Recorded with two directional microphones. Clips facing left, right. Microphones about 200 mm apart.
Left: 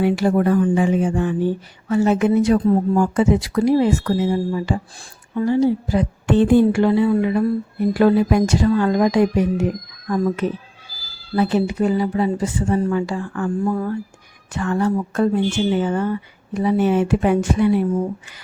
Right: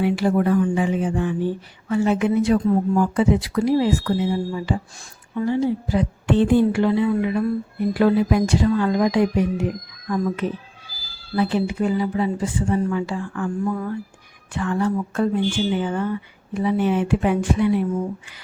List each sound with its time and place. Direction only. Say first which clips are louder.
0.0 s speech: left 2 dB; 45° left (ahead or behind)
11.3 s speech: left 3 dB; 45° left (ahead or behind)
13.7 s speech: left 3 dB; 35° left (ahead or behind)
14.5 s speech: left 2 dB; 45° left (ahead or behind)